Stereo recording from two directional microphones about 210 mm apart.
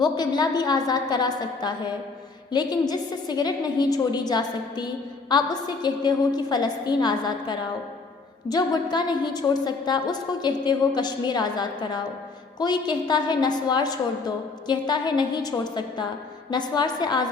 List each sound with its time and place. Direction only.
0.0 s a woman's voice: 20° left (ahead or behind)